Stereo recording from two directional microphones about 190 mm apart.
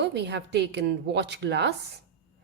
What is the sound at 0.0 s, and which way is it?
A woman's voice, 65° right (ahead or behind).